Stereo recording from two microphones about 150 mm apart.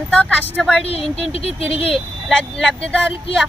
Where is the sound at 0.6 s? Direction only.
Centre (ahead or behind).